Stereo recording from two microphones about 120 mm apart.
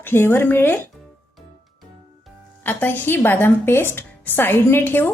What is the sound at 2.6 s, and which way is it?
Speech, 15° left (ahead or behind).